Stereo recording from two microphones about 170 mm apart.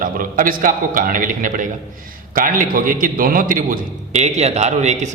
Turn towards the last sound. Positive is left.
turn(degrees=-45)  # may be behind; listen again after turning